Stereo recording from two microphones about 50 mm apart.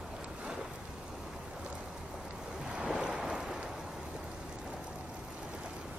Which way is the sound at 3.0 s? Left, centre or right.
Centre.